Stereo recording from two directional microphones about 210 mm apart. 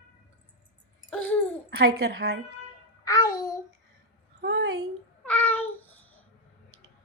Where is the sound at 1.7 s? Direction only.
50° right (ahead or behind).